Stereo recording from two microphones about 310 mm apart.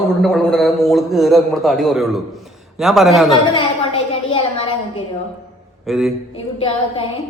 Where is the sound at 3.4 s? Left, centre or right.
Centre.